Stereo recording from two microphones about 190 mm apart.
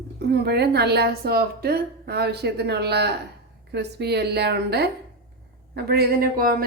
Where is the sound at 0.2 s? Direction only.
60° right (ahead or behind).